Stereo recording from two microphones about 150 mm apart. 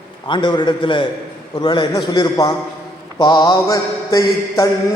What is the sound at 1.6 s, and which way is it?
Mantra, 30° left (ahead or behind).